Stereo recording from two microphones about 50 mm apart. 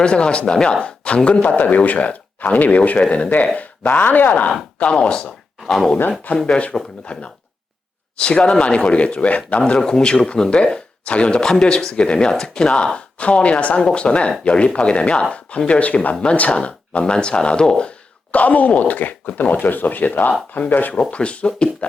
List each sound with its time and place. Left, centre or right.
0.0 s a man's voice: centre; by 4.5 s left
4.9 s a man's voice: centre
18.3 s speech: left
21.1 s a man's voice: left